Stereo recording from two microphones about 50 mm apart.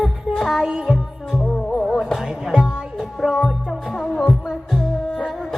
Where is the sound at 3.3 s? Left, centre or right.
Centre.